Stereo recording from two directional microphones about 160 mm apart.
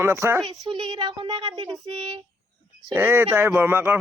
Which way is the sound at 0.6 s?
30° right (ahead or behind).